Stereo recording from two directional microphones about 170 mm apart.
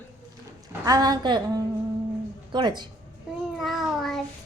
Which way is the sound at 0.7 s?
20° right (ahead or behind).